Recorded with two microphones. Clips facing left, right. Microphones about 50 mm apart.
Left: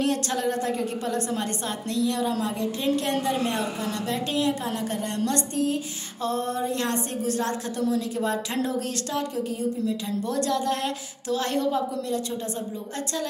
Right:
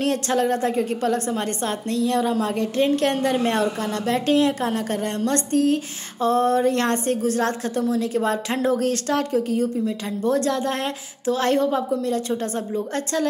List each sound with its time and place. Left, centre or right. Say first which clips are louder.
0.0 s speech: right 4 dB; right
6.6 s a woman's voice: right 6 dB; right